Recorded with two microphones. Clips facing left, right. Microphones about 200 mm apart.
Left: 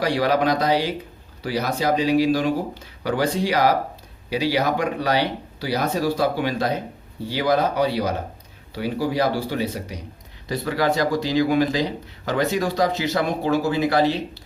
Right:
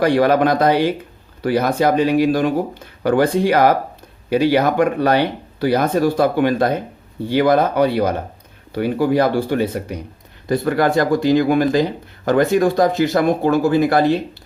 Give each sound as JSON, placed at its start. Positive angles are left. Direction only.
{"t": 0.0, "sound": "speech", "side_deg": -55}